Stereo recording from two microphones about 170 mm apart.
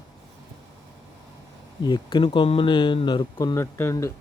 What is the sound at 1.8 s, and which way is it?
Speech, 25° left (ahead or behind).